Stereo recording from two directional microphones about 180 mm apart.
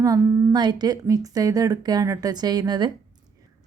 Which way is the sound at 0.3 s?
15° right (ahead or behind).